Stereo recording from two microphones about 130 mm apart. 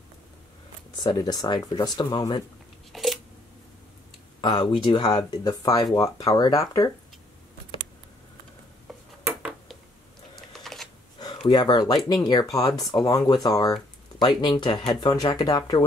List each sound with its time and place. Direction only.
0.9 s speech: 30° left (ahead or behind)
2.9 s a sound: centre (ahead or behind)
4.4 s speech: 35° left (ahead or behind)
9.2 s a sound: 10° right (ahead or behind)
10.5 s typing: centre (ahead or behind)
11.4 s speech: 35° left (ahead or behind)